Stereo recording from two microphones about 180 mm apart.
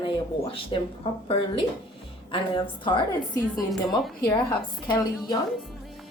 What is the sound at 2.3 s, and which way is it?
Speech, 25° left (ahead or behind).